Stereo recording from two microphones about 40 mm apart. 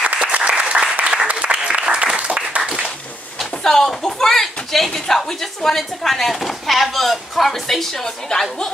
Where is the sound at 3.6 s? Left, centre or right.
Centre.